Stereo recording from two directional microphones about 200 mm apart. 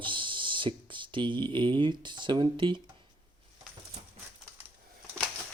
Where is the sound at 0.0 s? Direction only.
25° right (ahead or behind).